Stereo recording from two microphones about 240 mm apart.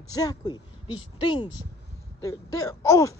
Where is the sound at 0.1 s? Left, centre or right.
Centre.